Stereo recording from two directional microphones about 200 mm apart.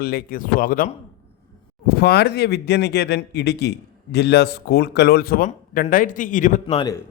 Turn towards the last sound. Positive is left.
turn(degrees=20)  # may be behind; listen again after turning